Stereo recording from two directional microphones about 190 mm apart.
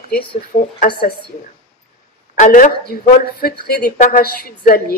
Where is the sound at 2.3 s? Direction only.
40° left (ahead or behind).